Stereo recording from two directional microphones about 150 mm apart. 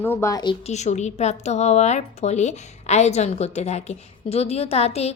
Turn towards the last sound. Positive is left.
turn(degrees=45)  # may be behind; listen again after turning